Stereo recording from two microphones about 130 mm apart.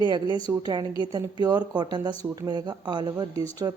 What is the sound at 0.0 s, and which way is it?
Speech, 35° right (ahead or behind).